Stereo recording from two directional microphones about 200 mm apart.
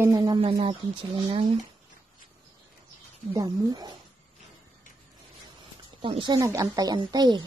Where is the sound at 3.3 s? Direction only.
20° right (ahead or behind).